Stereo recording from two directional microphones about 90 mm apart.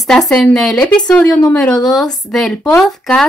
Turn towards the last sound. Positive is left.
turn(degrees=5)  # may be behind; listen again after turning